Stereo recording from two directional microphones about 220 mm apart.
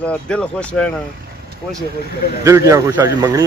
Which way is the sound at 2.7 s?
15° right (ahead or behind).